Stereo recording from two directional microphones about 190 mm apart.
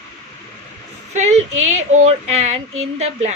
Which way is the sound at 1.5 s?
90° right.